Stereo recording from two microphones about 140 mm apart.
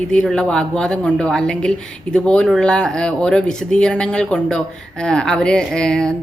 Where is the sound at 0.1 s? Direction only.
5° left (ahead or behind).